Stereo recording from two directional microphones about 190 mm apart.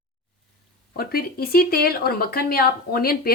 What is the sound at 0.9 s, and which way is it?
Speech, 50° left (ahead or behind).